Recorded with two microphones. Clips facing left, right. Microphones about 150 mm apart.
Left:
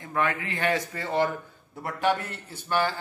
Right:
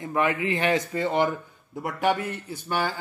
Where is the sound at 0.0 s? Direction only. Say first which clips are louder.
Right 3 dB; 20° right (ahead or behind).